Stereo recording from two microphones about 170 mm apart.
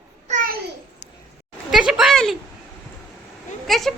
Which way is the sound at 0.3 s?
50° right (ahead or behind).